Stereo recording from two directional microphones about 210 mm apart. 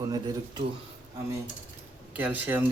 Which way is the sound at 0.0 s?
20° right (ahead or behind).